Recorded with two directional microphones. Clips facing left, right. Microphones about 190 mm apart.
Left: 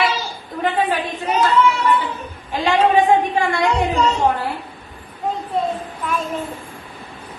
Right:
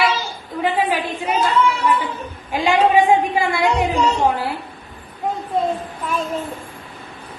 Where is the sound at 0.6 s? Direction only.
10° right (ahead or behind).